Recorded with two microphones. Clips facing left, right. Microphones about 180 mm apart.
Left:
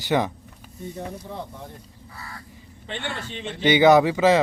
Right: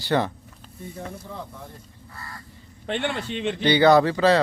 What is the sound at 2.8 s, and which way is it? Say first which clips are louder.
Speech: right 6 dB; 65° right (ahead or behind).